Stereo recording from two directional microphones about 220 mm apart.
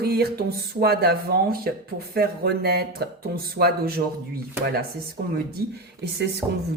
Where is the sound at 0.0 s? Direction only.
45° right (ahead or behind).